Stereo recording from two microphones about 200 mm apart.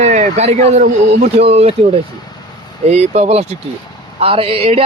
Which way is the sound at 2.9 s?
30° right (ahead or behind).